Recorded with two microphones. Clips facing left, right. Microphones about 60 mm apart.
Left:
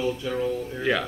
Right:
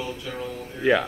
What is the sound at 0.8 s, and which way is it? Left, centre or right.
Speech, centre.